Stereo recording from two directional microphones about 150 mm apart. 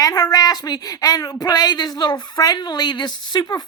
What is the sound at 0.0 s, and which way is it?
Speech, 25° left (ahead or behind).